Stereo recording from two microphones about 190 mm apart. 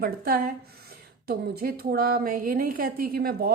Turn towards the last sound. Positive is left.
turn(degrees=-55)  # may be behind; listen again after turning